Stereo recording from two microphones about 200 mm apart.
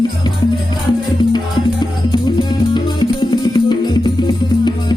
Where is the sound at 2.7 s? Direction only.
20° left (ahead or behind).